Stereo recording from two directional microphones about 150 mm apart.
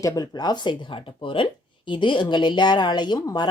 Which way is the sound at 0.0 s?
25° left (ahead or behind).